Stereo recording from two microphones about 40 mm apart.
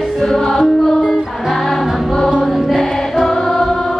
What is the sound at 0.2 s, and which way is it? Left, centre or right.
Music, centre.